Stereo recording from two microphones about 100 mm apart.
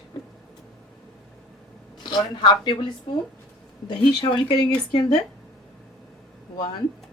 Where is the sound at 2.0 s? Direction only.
50° left (ahead or behind).